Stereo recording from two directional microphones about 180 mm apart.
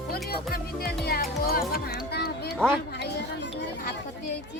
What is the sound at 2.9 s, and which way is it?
Children playing, 70° left (ahead or behind).